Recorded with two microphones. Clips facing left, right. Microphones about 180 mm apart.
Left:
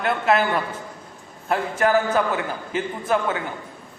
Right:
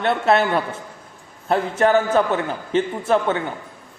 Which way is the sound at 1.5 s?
30° right (ahead or behind).